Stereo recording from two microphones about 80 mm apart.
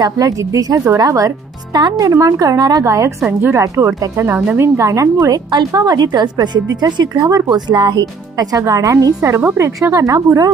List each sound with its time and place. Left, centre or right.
0.0 s speech: right
2.8 s speech: right